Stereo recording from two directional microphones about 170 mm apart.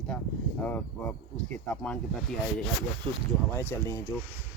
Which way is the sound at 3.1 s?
25° right (ahead or behind).